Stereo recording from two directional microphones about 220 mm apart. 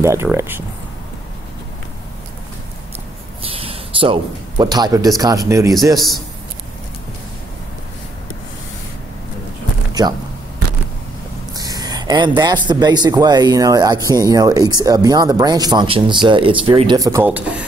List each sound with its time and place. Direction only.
0.0 s speech: 10° right (ahead or behind)
3.4 s speech: 25° right (ahead or behind)
10.0 s speech: 20° right (ahead or behind)
11.5 s speech: 15° right (ahead or behind)